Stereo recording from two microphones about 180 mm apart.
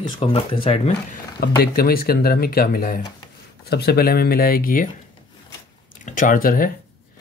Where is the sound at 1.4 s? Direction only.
60° left (ahead or behind).